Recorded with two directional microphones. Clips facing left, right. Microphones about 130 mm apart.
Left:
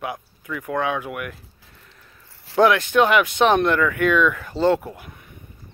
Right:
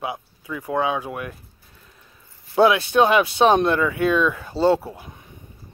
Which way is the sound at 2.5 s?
15° right (ahead or behind).